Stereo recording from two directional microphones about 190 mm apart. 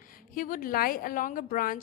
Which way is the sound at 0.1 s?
45° left (ahead or behind).